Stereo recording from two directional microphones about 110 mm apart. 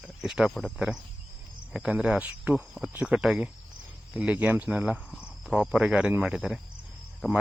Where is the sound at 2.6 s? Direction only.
Centre (ahead or behind).